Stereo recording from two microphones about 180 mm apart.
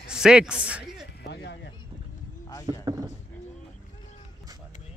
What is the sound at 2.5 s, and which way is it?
Speech, 20° left (ahead or behind).